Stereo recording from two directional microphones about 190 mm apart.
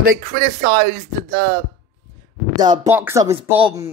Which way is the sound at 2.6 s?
20° right (ahead or behind).